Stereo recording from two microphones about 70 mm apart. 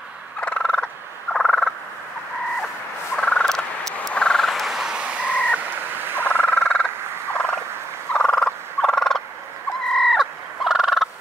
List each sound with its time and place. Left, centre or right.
0.4 s gobble: centre
3.2 s frog: centre
5.6 s frog: right
6.2 s frog: left
7.3 s fowl: centre